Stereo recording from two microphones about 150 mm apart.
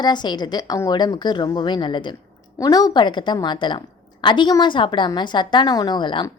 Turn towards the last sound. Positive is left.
turn(degrees=30)  # may be behind; listen again after turning